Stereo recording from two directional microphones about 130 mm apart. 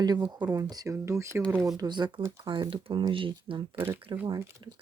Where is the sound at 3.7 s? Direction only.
15° right (ahead or behind).